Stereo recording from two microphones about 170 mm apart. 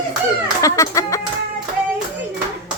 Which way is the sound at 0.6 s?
20° left (ahead or behind).